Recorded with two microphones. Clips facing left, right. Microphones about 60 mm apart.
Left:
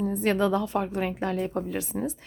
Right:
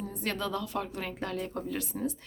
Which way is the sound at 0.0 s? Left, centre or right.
Left.